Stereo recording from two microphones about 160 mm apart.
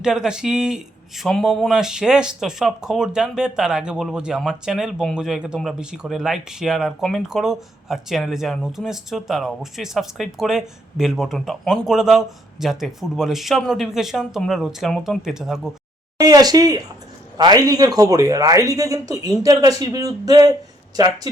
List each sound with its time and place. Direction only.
0.0 s speech: 5° right (ahead or behind)
16.1 s speech: 25° right (ahead or behind)